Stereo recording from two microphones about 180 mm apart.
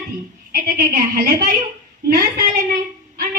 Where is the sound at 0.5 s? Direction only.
55° right (ahead or behind).